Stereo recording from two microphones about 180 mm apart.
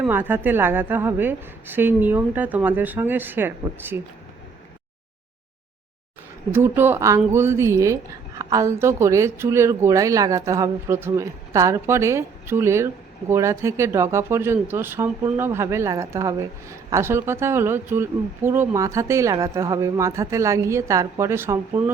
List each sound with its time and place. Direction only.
0.0 s speech: 10° right (ahead or behind)
6.5 s speech: 10° right (ahead or behind)